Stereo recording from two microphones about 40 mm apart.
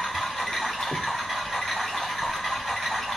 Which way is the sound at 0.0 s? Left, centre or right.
Centre.